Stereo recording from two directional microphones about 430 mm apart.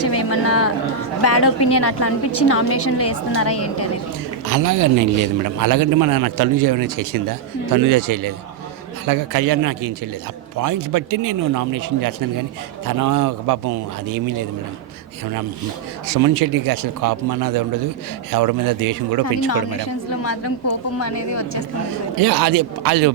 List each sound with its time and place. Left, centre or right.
0.0 s a woman's voice: left
4.4 s a man's voice: right
16.0 s a man's voice: right
19.5 s a woman's voice: left
22.2 s a man's voice: right